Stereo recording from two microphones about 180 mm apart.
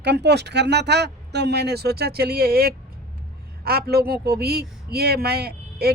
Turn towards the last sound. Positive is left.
turn(degrees=-60)  # may be behind; listen again after turning